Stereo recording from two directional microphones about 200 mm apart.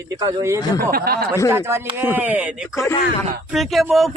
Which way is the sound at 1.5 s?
10° right (ahead or behind).